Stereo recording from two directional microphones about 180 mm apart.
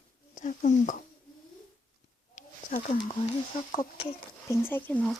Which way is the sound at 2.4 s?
45° left (ahead or behind).